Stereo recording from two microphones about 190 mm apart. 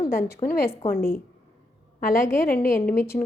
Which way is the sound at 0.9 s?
15° left (ahead or behind).